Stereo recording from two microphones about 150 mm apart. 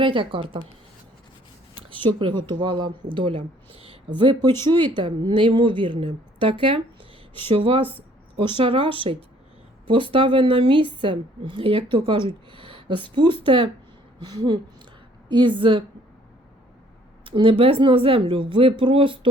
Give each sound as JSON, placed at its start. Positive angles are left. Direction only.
{"t": 0.0, "sound": "a woman's voice", "side_deg": -35}
{"t": 1.9, "sound": "a woman's voice", "side_deg": -35}
{"t": 17.2, "sound": "a woman's voice", "side_deg": -35}